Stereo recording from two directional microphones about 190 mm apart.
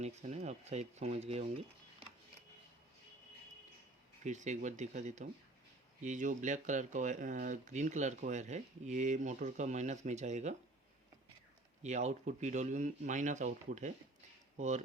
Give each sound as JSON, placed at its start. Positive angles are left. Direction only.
{"t": 0.0, "sound": "speech", "side_deg": -35}
{"t": 4.2, "sound": "speech", "side_deg": -40}
{"t": 11.8, "sound": "speech", "side_deg": -35}